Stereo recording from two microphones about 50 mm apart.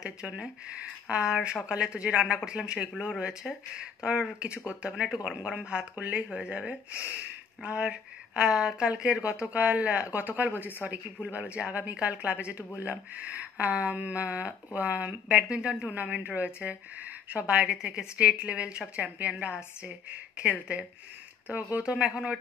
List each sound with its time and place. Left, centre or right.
0.4 s a woman's voice: right
6.2 s a woman's voice: centre
15.2 s a woman's voice: right
21.9 s speech: centre